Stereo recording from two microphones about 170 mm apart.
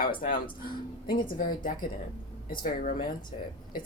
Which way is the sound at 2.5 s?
55° left (ahead or behind).